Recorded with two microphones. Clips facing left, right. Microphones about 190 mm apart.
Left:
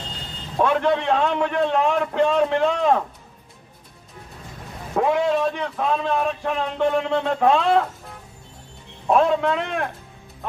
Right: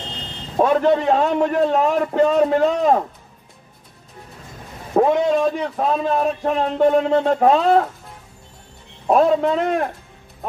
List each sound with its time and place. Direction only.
0.6 s a man's voice: 40° right (ahead or behind)
4.9 s a man's voice: 40° right (ahead or behind)
9.1 s a man's voice: 40° right (ahead or behind)